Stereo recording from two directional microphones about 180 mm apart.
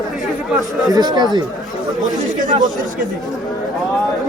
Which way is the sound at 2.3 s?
45° right (ahead or behind).